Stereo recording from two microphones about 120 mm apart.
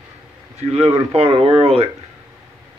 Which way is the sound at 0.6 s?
60° right (ahead or behind).